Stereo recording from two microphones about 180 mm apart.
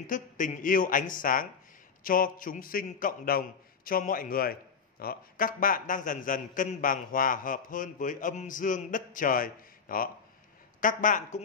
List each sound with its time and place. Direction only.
0.0 s a man's voice: 45° left (ahead or behind)